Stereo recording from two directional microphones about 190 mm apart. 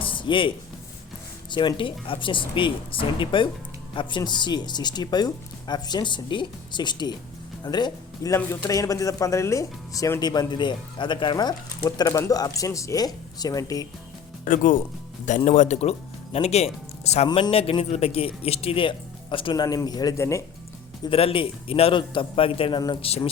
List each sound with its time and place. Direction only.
0.0 s a sound: 25° left (ahead or behind)
1.5 s speech: 25° left (ahead or behind)
14.4 s speech: 45° left (ahead or behind); by 20.4 s 15° left (ahead or behind)
21.0 s speech: 30° left (ahead or behind)